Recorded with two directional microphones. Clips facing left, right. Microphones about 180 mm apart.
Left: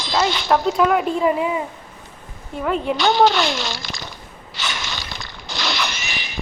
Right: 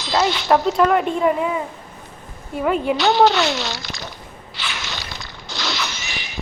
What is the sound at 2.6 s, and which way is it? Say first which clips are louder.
Speech: right 1 dB; 5° right (ahead or behind).